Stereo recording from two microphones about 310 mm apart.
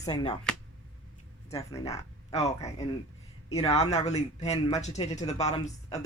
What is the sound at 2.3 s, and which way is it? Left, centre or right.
A man's voice, left.